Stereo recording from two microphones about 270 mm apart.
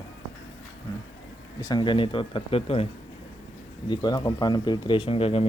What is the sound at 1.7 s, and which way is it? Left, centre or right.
Speech, centre.